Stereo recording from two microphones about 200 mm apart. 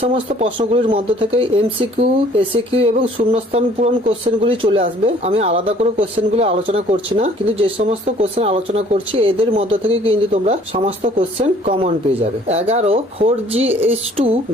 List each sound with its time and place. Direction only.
0.0 s speech: 30° right (ahead or behind)